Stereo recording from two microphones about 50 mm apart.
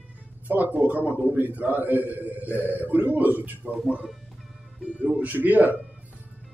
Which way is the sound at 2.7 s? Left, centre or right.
Right.